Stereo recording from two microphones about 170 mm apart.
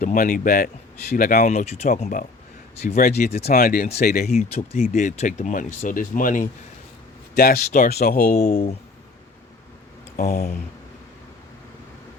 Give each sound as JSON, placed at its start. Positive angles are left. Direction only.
{"t": 0.0, "sound": "speech", "side_deg": 50}
{"t": 4.8, "sound": "speech", "side_deg": 50}
{"t": 7.3, "sound": "speech", "side_deg": 60}
{"t": 8.4, "sound": "speech", "side_deg": 40}
{"t": 10.2, "sound": "speech", "side_deg": 55}